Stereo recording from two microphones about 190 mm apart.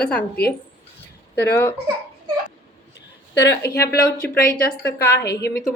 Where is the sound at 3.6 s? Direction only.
55° left (ahead or behind).